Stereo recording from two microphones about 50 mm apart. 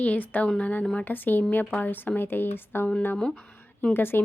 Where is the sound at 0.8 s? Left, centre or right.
Centre.